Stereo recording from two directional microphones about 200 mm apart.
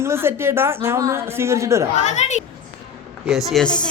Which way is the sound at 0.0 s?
10° right (ahead or behind).